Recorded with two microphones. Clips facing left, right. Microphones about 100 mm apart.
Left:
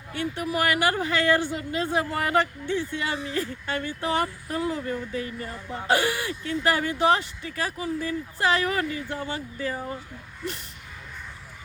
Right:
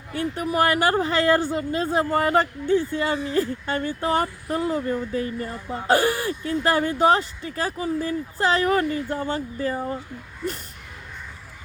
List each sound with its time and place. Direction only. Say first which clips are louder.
0.1 s speech: right 3 dB; 40° right (ahead or behind)